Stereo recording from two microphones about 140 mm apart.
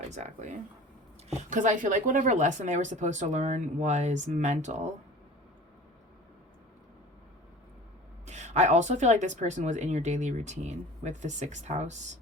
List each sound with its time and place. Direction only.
0.1 s speech: 55° right (ahead or behind)
8.3 s speech: 55° right (ahead or behind)